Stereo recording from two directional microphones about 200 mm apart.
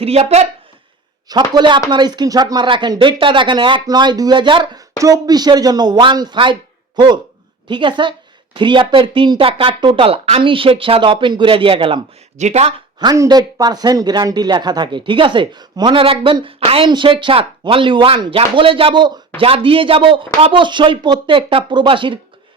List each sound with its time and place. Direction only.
0.0 s speech: 30° right (ahead or behind)